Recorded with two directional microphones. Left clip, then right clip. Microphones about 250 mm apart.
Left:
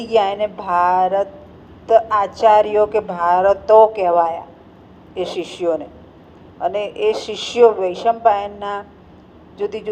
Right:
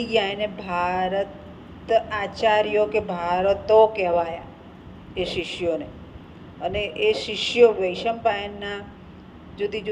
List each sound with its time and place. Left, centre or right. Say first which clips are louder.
0.0 s speech: left 6 dB; left